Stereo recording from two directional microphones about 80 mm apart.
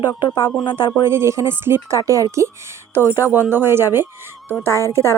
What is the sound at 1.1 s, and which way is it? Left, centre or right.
Speech, right.